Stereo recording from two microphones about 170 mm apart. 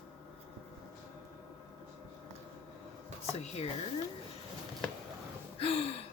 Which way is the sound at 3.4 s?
40° left (ahead or behind).